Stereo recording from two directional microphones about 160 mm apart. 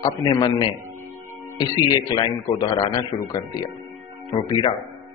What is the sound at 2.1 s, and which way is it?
A man's voice, 25° left (ahead or behind).